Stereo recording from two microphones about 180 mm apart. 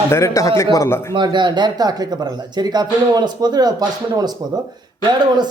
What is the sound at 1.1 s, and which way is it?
A man's voice, 25° right (ahead or behind).